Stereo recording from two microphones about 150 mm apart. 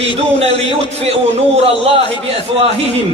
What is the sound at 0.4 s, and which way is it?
A man's voice, 45° right (ahead or behind).